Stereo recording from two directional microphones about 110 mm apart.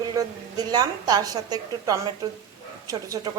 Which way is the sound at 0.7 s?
40° right (ahead or behind).